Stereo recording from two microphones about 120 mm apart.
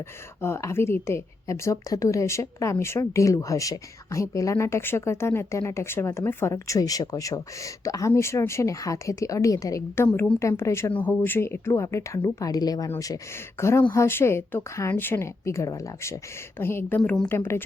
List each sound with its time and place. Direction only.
0.4 s a woman's voice: 20° left (ahead or behind)
17.0 s speech: 5° left (ahead or behind)
17.2 s a woman's voice: 20° left (ahead or behind)